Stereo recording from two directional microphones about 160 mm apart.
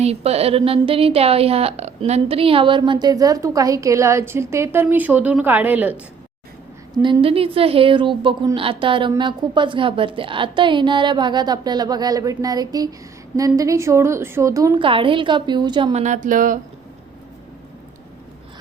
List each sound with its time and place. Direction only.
0.0 s a woman's voice: 40° right (ahead or behind); by 6.0 s 10° right (ahead or behind)
6.9 s a woman's voice: 30° right (ahead or behind)
14.8 s a woman's voice: 35° right (ahead or behind); by 16.6 s 55° right (ahead or behind)